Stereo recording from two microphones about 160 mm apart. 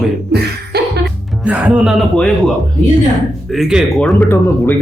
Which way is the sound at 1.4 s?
5° right (ahead or behind).